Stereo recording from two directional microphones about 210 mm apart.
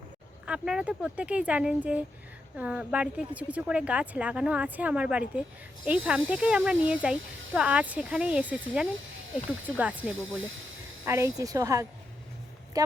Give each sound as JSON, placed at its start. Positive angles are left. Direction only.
{"t": 0.4, "sound": "a woman's voice", "side_deg": -5}